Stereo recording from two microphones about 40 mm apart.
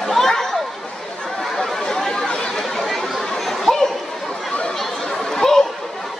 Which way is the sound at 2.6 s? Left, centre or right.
Centre.